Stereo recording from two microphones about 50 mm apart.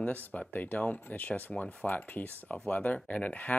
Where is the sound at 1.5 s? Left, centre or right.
Centre.